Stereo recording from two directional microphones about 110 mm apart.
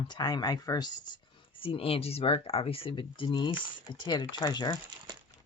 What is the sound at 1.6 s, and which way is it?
Speech, 55° left (ahead or behind).